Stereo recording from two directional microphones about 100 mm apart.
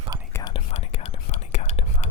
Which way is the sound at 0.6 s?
90° left.